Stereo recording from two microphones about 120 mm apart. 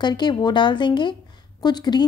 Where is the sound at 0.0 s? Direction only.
35° left (ahead or behind).